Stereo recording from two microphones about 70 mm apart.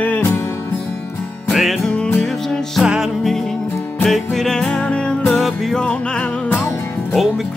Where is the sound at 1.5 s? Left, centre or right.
Centre.